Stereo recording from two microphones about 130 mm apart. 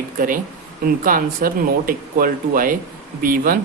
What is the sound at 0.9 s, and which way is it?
Speech, 90° right.